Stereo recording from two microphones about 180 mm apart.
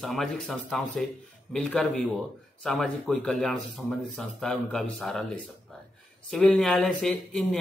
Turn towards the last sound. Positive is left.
turn(degrees=5)  # may be behind; listen again after turning